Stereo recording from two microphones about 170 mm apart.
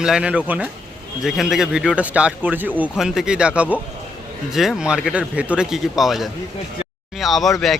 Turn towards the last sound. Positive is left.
turn(degrees=0)  # may be behind; listen again after turning